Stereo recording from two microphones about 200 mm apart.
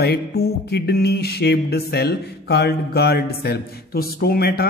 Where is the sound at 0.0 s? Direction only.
50° left (ahead or behind).